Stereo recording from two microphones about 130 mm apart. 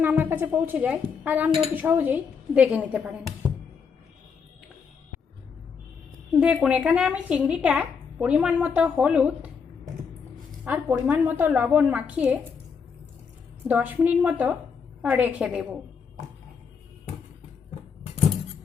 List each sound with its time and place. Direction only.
0.0 s music: 15° right (ahead or behind)
0.5 s a woman's voice: 15° right (ahead or behind)
6.4 s a woman's voice: 5° right (ahead or behind)
10.6 s a woman's voice: 10° right (ahead or behind)
13.7 s a woman's voice: 10° right (ahead or behind)